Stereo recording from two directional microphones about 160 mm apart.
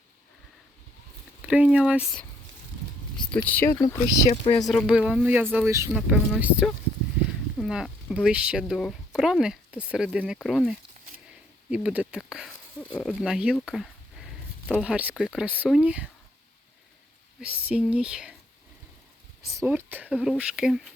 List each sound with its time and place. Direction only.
1.4 s speech: 10° right (ahead or behind)
3.2 s speech: 10° left (ahead or behind)
3.7 s speech: 25° left (ahead or behind)
4.6 s speech: centre (ahead or behind); by 5.9 s 15° right (ahead or behind)
5.9 s speech: 5° right (ahead or behind)
12.8 s a sound: 5° left (ahead or behind)
13.1 s speech: 5° right (ahead or behind)
13.7 s a sound: centre (ahead or behind)
14.8 s speech: 5° right (ahead or behind)
17.4 s speech: 5° right (ahead or behind)
19.5 s speech: 15° right (ahead or behind)